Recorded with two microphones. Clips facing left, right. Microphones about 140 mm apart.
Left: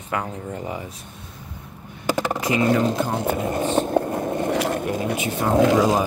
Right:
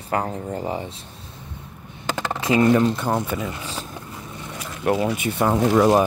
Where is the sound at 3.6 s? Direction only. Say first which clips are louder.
Left 12 dB; 35° left (ahead or behind).